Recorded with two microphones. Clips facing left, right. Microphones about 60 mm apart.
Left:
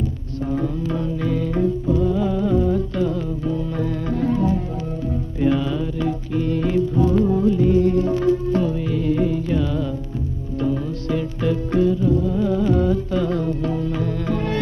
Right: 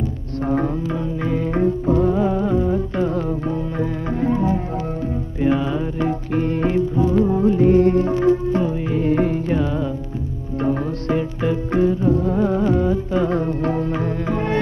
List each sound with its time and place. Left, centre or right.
0.8 s music: centre; by 2.1 s right
2.1 s music: right
3.1 s music: right
3.5 s music: right
7.0 s music: right
7.4 s music: right
8.2 s music: right
11.4 s music: right
12.7 s music: right
14.2 s music: right